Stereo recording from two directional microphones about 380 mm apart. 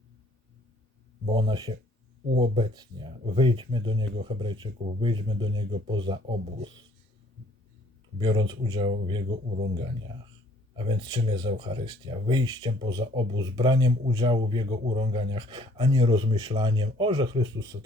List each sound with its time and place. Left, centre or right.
1.2 s speech: centre
8.2 s speech: centre
10.8 s speech: centre